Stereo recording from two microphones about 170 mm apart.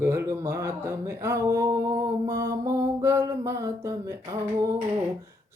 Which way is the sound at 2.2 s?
20° right (ahead or behind).